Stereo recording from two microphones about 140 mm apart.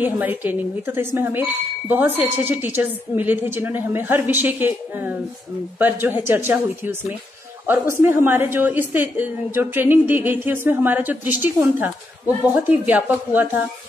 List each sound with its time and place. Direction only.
0.0 s speech: 15° right (ahead or behind)